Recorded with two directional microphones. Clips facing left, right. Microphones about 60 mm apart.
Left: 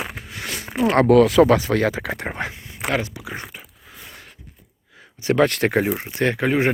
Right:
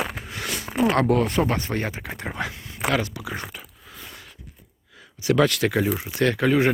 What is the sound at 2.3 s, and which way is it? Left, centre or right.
Speech, left.